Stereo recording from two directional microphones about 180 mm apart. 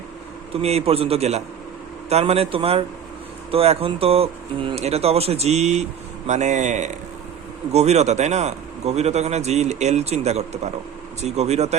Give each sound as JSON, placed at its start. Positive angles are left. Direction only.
{"t": 0.5, "sound": "a man's voice", "side_deg": -35}